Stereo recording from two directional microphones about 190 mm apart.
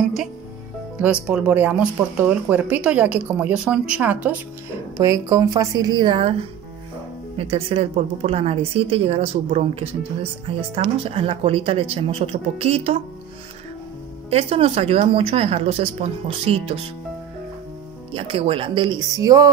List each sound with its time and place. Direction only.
1.2 s speech: 10° right (ahead or behind); by 6.3 s 25° right (ahead or behind)
7.3 s speech: 30° right (ahead or behind)
14.3 s speech: 30° right (ahead or behind)
18.1 s speech: 30° right (ahead or behind)